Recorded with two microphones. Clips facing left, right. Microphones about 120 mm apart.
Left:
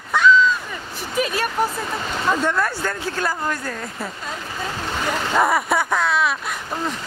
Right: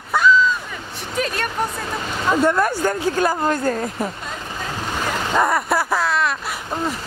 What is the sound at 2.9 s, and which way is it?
Speech, 20° right (ahead or behind).